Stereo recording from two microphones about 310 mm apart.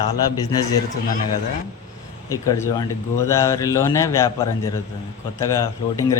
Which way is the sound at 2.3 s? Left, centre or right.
Centre.